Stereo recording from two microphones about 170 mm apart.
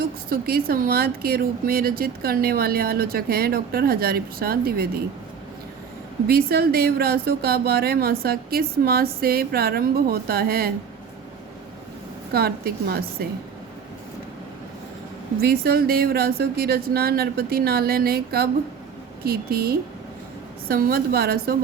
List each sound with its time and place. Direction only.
0.0 s a woman's voice: 60° right (ahead or behind)
6.2 s a woman's voice: 65° right (ahead or behind)
12.3 s a woman's voice: 65° right (ahead or behind)
15.4 s a woman's voice: 65° right (ahead or behind)